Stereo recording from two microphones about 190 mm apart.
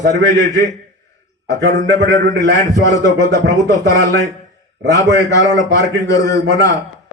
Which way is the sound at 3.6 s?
20° left (ahead or behind).